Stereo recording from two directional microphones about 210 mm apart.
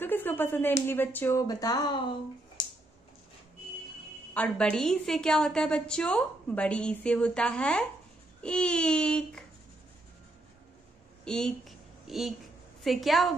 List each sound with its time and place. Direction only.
0.0 s speech: 10° left (ahead or behind)
2.6 s a sound: 20° left (ahead or behind)
4.3 s a woman's voice: 5° left (ahead or behind)
11.2 s a woman's voice: centre (ahead or behind)